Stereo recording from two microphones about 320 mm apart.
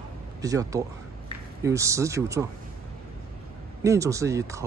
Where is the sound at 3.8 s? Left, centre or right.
Centre.